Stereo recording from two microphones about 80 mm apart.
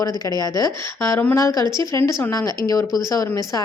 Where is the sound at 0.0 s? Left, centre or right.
Left.